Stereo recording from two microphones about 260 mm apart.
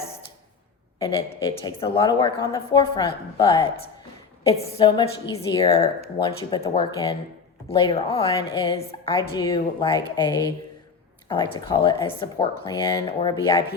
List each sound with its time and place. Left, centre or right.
0.9 s a woman's voice: centre